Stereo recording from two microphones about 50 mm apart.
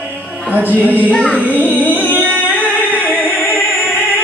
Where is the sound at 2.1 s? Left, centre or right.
Right.